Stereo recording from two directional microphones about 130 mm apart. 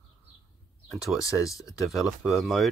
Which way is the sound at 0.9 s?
Centre (ahead or behind).